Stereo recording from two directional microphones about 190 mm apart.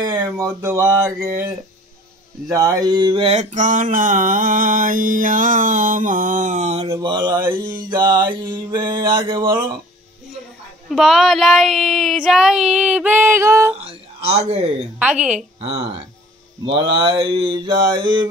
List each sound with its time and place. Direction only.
0.0 s a sound: 15° right (ahead or behind)
2.5 s mantra: 20° right (ahead or behind); by 6.9 s 35° right (ahead or behind)
6.9 s mantra: 25° right (ahead or behind)
10.9 s child singing: centre (ahead or behind)
13.7 s a sound: 35° right (ahead or behind)
15.0 s child singing: 5° right (ahead or behind)
15.6 s speech: 30° right (ahead or behind)
16.7 s mantra: 25° right (ahead or behind)